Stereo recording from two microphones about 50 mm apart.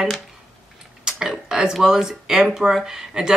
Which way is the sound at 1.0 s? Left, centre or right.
Centre.